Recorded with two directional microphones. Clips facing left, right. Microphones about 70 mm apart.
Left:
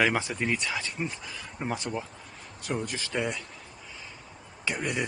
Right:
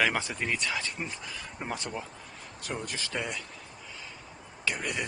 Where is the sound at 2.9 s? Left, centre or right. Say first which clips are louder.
Left 4 dB; centre.